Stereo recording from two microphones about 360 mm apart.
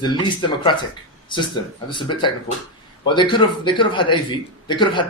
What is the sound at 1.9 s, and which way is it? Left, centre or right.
A man's voice, centre.